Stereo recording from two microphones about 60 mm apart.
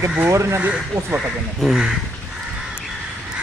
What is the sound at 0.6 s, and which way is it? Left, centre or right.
Speech, right.